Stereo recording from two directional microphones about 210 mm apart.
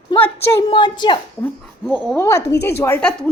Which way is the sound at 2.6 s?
50° left (ahead or behind).